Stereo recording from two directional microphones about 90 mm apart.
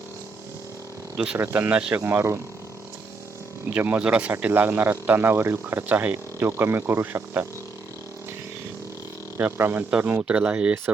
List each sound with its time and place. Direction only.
1.1 s speech: 10° right (ahead or behind); by 2.4 s 25° right (ahead or behind)
3.7 s speech: 20° right (ahead or behind)
9.4 s speech: 25° right (ahead or behind)